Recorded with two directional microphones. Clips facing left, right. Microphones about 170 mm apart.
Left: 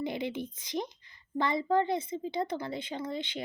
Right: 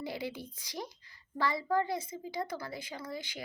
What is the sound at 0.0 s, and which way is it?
A woman's voice, 20° left (ahead or behind).